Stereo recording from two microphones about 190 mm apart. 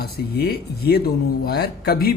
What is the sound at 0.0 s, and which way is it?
A man's voice, 55° left (ahead or behind).